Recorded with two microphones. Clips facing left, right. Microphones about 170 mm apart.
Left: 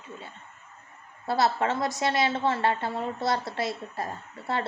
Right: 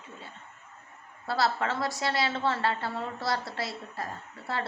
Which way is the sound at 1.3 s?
20° left (ahead or behind).